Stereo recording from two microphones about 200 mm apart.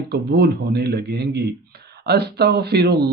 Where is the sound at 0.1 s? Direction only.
55° right (ahead or behind).